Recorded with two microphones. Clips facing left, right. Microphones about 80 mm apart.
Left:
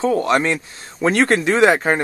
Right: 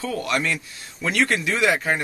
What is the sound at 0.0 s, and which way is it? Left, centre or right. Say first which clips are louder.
A man's voice: left 8 dB; left.